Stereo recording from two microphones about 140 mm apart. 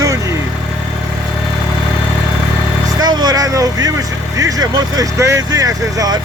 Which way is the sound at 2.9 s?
30° right (ahead or behind).